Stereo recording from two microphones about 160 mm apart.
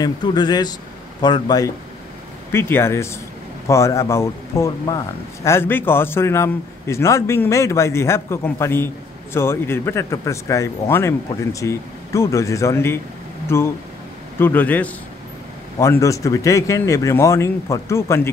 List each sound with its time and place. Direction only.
0.0 s speech: 25° left (ahead or behind)
2.5 s speech: 15° left (ahead or behind)